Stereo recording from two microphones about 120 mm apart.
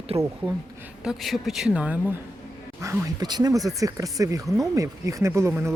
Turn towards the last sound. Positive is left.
turn(degrees=-20)  # may be behind; listen again after turning